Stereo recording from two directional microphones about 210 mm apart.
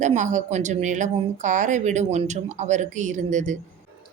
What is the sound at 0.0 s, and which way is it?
A woman's voice, 35° right (ahead or behind).